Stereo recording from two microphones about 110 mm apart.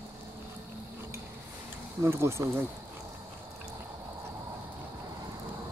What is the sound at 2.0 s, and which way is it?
Speech, 25° right (ahead or behind).